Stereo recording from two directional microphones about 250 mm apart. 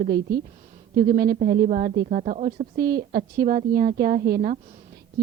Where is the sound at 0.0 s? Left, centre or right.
Right.